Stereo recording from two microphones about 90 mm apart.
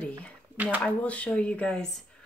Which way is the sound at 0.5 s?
20° right (ahead or behind).